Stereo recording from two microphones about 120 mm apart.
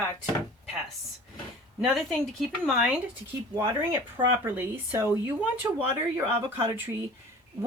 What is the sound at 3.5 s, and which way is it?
Speech, 20° right (ahead or behind).